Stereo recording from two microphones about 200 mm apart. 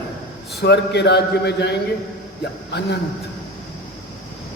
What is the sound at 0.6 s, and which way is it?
A man's voice, 60° left (ahead or behind).